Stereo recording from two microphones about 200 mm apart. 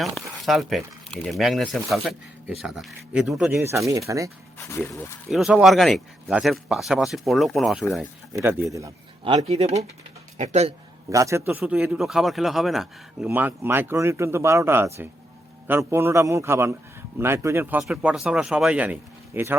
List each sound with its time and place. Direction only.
0.0 s speech: centre (ahead or behind)
3.5 s a man's voice: 15° right (ahead or behind)
4.5 s speech: 10° left (ahead or behind)
5.3 s speech: 5° right (ahead or behind)
8.3 s a man's voice: 15° right (ahead or behind)
9.2 s speech: 30° right (ahead or behind)
11.1 s a man's voice: 15° right (ahead or behind)